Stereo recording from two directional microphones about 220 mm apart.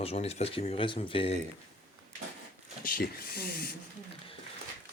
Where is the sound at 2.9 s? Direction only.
40° left (ahead or behind).